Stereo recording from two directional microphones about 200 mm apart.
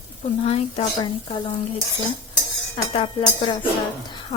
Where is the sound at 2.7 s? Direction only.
25° left (ahead or behind).